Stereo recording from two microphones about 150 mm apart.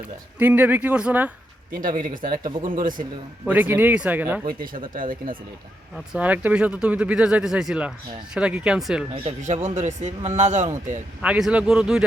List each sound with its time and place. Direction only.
0.3 s speech: 10° right (ahead or behind)
1.7 s speech: 65° right (ahead or behind)
3.4 s speech: 10° right (ahead or behind)
4.4 s speech: 70° right (ahead or behind)
6.1 s speech: 10° right (ahead or behind)
9.4 s a man's voice: 50° right (ahead or behind)
11.2 s speech: 5° right (ahead or behind)